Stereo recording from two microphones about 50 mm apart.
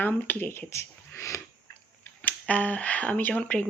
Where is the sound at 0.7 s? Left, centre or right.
Left.